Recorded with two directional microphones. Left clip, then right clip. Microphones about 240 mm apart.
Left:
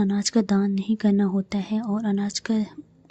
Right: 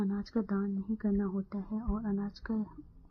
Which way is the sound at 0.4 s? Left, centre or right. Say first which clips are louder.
Left 11 dB; left.